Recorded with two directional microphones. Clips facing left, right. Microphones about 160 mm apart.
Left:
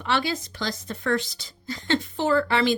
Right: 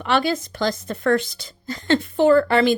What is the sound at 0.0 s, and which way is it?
A woman's voice, 50° right (ahead or behind).